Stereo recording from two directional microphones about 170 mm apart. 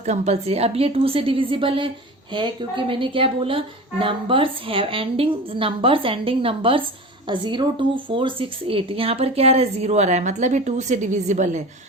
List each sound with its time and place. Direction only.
0.0 s a woman's voice: 40° right (ahead or behind)